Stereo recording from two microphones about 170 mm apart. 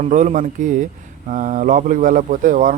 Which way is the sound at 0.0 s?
45° right (ahead or behind).